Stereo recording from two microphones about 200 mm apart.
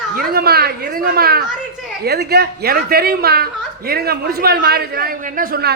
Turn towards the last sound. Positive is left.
turn(degrees=-45)  # may be behind; listen again after turning